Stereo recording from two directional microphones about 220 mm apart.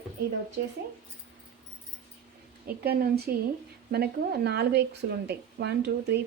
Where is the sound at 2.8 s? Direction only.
45° right (ahead or behind).